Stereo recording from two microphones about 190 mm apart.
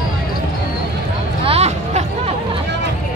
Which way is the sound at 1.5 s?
35° right (ahead or behind).